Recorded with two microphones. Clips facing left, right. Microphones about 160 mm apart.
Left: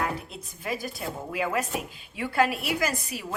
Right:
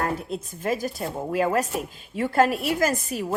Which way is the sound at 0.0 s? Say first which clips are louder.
Right 4 dB; 45° right (ahead or behind).